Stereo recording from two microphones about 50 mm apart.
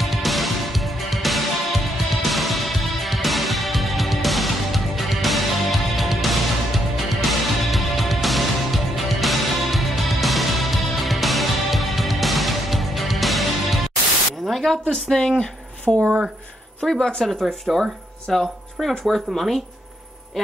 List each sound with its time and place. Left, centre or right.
0.0 s music: centre
14.4 s a sound: centre
16.8 s speech: centre